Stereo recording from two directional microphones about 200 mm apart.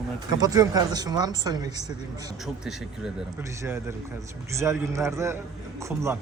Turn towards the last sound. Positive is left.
turn(degrees=-15)  # may be behind; listen again after turning